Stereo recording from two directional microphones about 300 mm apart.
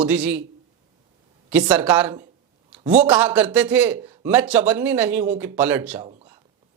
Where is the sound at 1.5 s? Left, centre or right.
Centre.